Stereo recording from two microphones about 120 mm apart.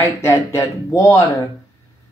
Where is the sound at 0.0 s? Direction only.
25° left (ahead or behind).